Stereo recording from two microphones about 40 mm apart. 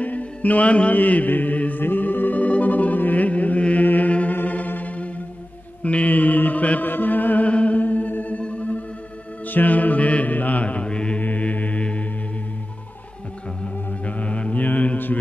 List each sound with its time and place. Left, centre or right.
0.0 s music: left
0.9 s mantra: left
1.8 s music: left
3.8 s chant: left
4.1 s mantra: left
4.4 s music: left
5.8 s mantra: left
6.9 s music: left
7.4 s music: left
9.5 s mantra: left
11.1 s mantra: left
14.0 s mantra: left